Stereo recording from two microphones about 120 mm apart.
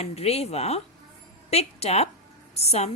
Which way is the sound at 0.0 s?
60° left (ahead or behind).